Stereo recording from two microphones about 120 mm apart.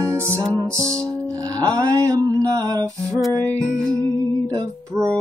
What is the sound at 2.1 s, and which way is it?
Mantra, 30° right (ahead or behind).